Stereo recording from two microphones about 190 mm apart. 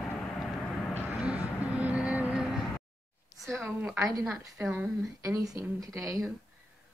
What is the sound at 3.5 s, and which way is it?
A woman's voice, 10° right (ahead or behind).